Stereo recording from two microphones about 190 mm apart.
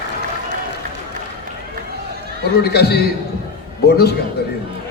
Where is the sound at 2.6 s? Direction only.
60° left (ahead or behind).